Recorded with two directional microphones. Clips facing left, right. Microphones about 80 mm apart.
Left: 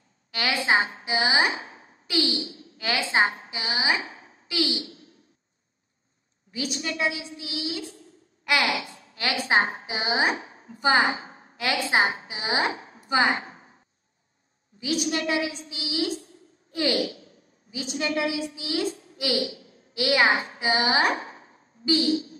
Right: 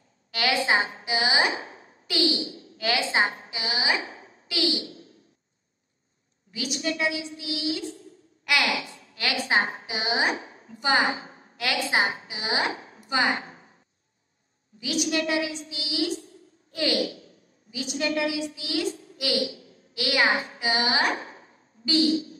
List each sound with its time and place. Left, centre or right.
0.3 s a woman's voice: left
1.7 s a sound: left
2.8 s a woman's voice: left
4.0 s a sound: right
6.5 s a woman's voice: left
14.8 s a woman's voice: left